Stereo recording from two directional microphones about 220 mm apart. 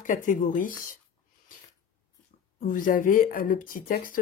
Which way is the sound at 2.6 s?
40° left (ahead or behind).